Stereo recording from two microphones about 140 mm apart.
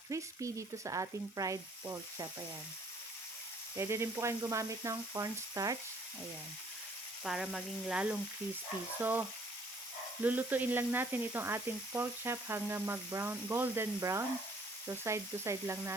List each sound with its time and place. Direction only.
0.1 s sizzle: 25° right (ahead or behind)
3.8 s sizzle: 20° right (ahead or behind)
7.3 s speech: centre (ahead or behind)
10.2 s speech: 10° right (ahead or behind)
14.8 s sizzle: 20° right (ahead or behind)